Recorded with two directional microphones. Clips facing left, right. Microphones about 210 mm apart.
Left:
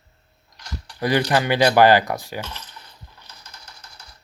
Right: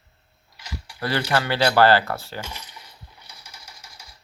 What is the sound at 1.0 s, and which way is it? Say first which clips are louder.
Speech: left 4 dB; 15° left (ahead or behind).